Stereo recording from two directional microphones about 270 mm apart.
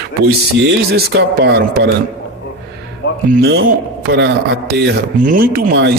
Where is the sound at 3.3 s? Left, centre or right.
Right.